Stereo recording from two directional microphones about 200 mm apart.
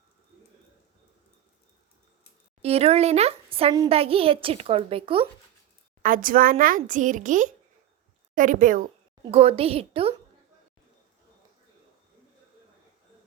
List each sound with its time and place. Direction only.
2.6 s speech: 30° right (ahead or behind)
6.0 s a woman's voice: 45° right (ahead or behind)
9.2 s speech: 30° right (ahead or behind)